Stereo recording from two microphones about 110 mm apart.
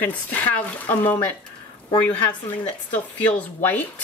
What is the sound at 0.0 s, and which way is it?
Speech, 15° left (ahead or behind).